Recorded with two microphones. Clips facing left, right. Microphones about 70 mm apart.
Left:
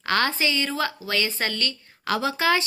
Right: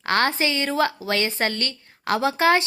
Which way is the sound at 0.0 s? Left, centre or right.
Right.